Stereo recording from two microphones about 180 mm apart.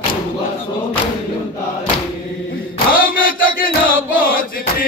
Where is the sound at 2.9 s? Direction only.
50° left (ahead or behind).